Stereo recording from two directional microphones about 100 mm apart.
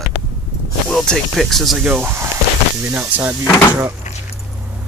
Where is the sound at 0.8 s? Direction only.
Centre (ahead or behind).